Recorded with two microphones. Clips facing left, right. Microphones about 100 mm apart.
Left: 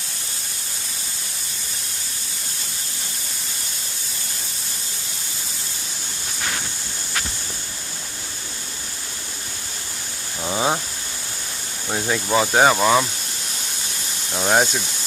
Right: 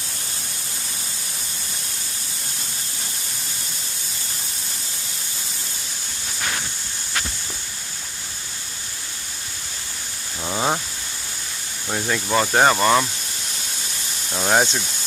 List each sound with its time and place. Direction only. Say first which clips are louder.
10.4 s a sound: left 1 dB; 5° left (ahead or behind)
11.9 s speech: left 1 dB; 10° left (ahead or behind)
14.3 s speech: left 1 dB; centre (ahead or behind)